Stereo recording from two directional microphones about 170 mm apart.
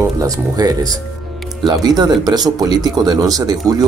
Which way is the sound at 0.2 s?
20° right (ahead or behind).